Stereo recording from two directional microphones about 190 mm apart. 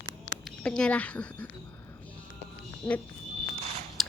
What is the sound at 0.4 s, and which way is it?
Speech, 5° left (ahead or behind).